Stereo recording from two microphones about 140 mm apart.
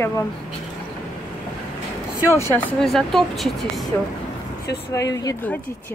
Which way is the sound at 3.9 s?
15° left (ahead or behind).